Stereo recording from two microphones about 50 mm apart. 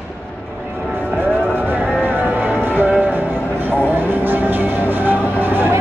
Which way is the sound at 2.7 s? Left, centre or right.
Right.